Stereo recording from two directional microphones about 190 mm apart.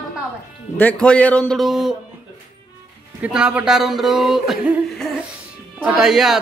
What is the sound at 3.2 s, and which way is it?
Speech, 5° right (ahead or behind).